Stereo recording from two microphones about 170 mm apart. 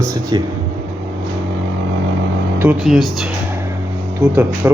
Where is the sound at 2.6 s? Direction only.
5° right (ahead or behind).